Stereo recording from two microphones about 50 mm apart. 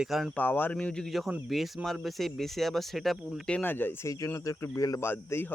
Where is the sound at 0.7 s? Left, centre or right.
Left.